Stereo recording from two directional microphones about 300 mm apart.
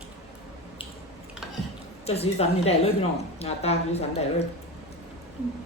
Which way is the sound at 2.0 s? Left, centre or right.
Centre.